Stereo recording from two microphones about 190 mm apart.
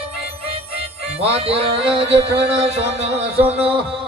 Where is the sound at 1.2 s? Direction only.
30° right (ahead or behind).